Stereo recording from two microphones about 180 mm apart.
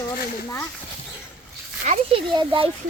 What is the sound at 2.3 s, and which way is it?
Speech, 25° right (ahead or behind).